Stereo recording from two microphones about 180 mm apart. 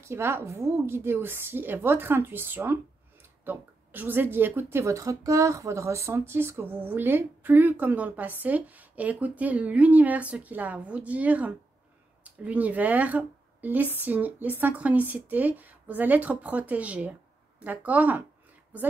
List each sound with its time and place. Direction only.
0.0 s a woman's voice: 15° right (ahead or behind)